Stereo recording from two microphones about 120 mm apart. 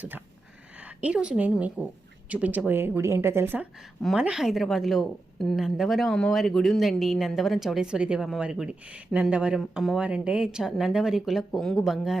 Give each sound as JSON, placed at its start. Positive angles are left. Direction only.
{"t": 0.8, "sound": "a woman's voice", "side_deg": -10}
{"t": 4.0, "sound": "a woman's voice", "side_deg": -5}